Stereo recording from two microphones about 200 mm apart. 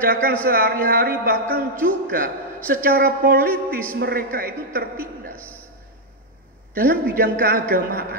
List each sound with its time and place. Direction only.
0.0 s a man's voice: 45° right (ahead or behind)
6.7 s a man's voice: 45° right (ahead or behind)